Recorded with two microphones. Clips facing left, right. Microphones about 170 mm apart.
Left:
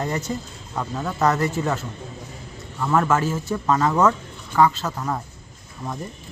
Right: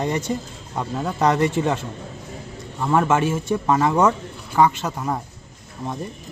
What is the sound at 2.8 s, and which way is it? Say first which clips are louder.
Speech: right 1 dB; 20° right (ahead or behind).